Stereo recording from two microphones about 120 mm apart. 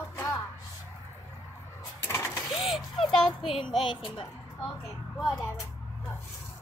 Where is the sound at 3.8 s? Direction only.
45° left (ahead or behind).